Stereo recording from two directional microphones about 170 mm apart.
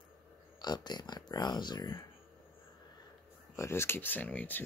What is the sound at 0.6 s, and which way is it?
Speech, 25° left (ahead or behind).